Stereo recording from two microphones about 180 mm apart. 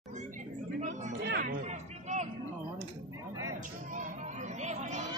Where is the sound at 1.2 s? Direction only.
60° right (ahead or behind).